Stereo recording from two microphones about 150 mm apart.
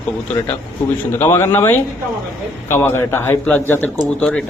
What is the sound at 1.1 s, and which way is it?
A man's voice, 15° left (ahead or behind).